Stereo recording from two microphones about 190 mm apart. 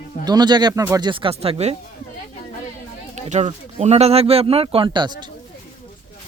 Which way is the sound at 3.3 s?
35° right (ahead or behind).